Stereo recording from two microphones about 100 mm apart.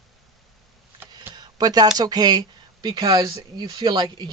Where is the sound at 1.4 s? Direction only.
45° right (ahead or behind).